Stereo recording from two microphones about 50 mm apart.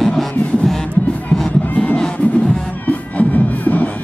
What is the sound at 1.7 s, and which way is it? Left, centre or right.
Crowd, left.